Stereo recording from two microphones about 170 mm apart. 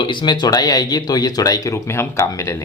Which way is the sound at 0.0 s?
25° left (ahead or behind).